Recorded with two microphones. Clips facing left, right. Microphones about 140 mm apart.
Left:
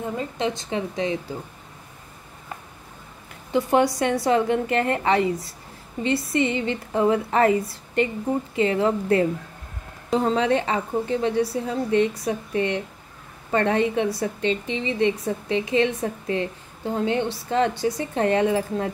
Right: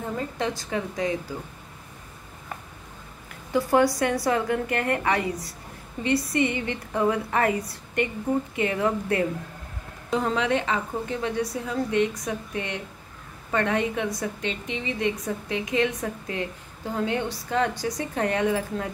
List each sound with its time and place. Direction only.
0.4 s a woman's voice: 25° left (ahead or behind)
3.5 s a woman's voice: 20° left (ahead or behind)
6.3 s a woman's voice: 25° left (ahead or behind)